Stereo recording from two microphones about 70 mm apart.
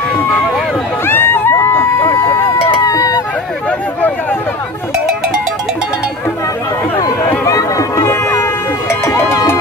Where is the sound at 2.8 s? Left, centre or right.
Left.